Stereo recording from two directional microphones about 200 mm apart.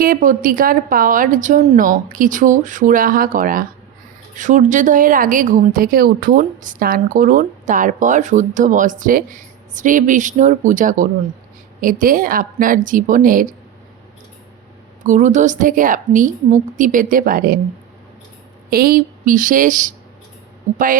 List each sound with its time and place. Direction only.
0.0 s a woman's voice: 45° right (ahead or behind)
15.0 s a woman's voice: 35° right (ahead or behind)
18.7 s a woman's voice: 45° right (ahead or behind)